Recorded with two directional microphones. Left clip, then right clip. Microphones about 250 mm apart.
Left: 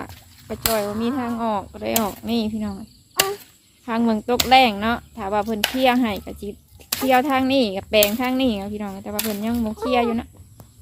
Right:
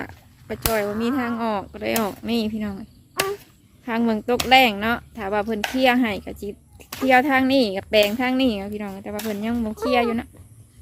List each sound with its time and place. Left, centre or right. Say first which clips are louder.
0.0 s speech: right 1 dB; centre
3.2 s chop: left 3 dB; centre
3.8 s speech: left 1 dB; centre